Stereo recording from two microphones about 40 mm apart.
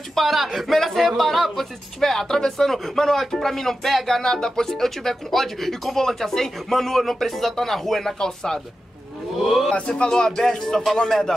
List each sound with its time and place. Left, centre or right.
0.1 s speech: centre
9.4 s speech: centre
9.8 s speech: centre